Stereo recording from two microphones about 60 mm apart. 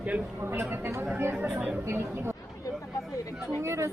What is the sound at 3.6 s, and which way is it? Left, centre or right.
Speech, right.